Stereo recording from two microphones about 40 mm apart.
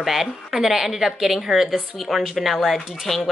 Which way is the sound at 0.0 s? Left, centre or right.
Centre.